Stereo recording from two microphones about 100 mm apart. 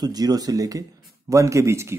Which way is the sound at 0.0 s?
40° right (ahead or behind).